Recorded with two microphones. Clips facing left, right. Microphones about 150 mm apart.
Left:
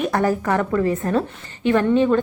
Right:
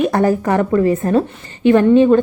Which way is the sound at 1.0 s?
20° right (ahead or behind).